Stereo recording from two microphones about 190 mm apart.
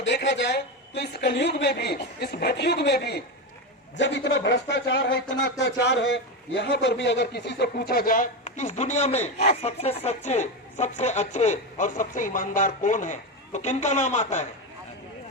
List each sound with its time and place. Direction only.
0.0 s a woman's voice: 65° left (ahead or behind); by 14.4 s 40° left (ahead or behind)